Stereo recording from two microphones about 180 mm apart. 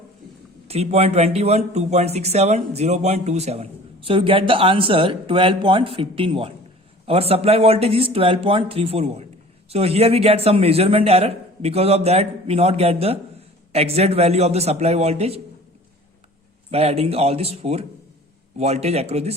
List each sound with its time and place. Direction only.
0.7 s speech: 35° right (ahead or behind)
16.7 s speech: 35° right (ahead or behind)